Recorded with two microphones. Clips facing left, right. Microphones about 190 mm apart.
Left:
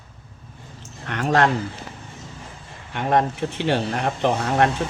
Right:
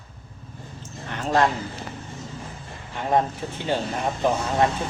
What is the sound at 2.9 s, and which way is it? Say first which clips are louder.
Speech: left 2 dB; 70° left (ahead or behind).